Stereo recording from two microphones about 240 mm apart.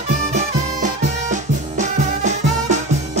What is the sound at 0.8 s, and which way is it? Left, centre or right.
Music, right.